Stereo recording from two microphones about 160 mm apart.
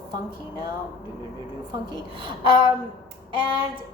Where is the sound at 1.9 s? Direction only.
30° right (ahead or behind).